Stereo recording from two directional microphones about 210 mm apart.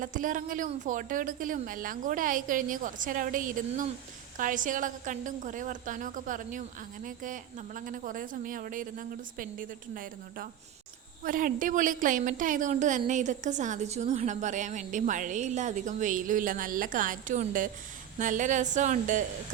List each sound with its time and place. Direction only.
0.0 s a woman's voice: 40° right (ahead or behind)